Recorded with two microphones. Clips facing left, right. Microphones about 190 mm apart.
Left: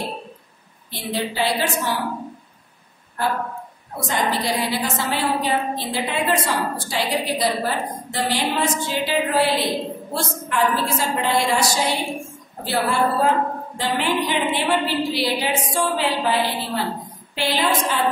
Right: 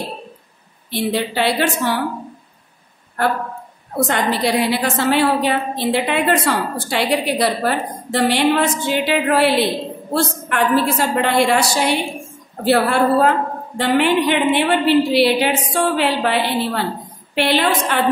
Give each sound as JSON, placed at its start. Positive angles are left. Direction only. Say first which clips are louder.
{"t": 0.9, "sound": "a woman's voice", "louder": "right 5 dB", "side_deg": -65}
{"t": 4.1, "sound": "a woman's voice", "louder": "right 3 dB", "side_deg": -65}